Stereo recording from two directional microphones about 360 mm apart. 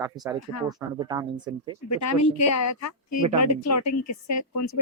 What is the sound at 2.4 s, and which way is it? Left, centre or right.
Speech, left.